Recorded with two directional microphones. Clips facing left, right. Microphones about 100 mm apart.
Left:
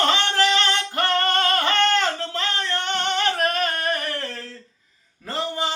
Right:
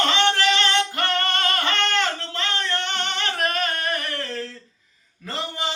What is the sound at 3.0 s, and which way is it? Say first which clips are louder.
Singing: left 4 dB; 40° left (ahead or behind).